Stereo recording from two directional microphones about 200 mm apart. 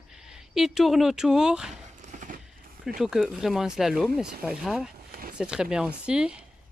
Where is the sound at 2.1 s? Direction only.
40° right (ahead or behind).